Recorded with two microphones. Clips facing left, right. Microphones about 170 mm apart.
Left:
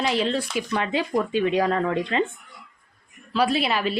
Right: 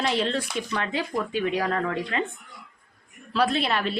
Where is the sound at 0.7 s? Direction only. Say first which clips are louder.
Left 6 dB; 15° left (ahead or behind).